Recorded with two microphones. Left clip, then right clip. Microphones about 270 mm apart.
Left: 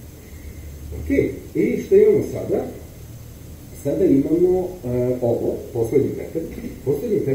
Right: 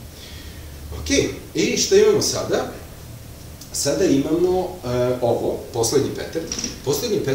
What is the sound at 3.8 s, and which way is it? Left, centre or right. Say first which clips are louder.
Speech: left 1 dB; right.